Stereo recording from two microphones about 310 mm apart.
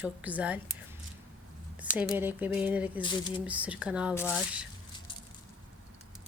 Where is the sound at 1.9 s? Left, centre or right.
Centre.